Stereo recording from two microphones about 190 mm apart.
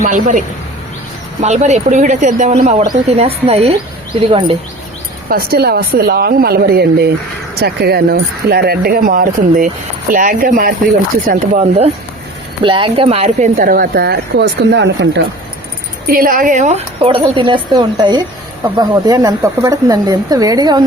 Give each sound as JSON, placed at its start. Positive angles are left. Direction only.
{"t": 0.0, "sound": "a woman's voice", "side_deg": -40}
{"t": 5.3, "sound": "speech", "side_deg": -55}
{"t": 12.6, "sound": "speech", "side_deg": -25}
{"t": 16.0, "sound": "a woman's voice", "side_deg": -50}